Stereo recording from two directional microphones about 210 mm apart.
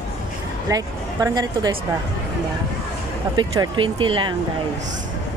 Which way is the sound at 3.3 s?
20° right (ahead or behind).